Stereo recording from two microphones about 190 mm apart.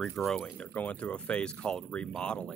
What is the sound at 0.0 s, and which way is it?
Speech, centre (ahead or behind).